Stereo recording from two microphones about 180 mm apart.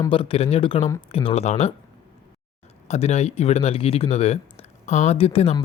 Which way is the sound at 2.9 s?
35° left (ahead or behind).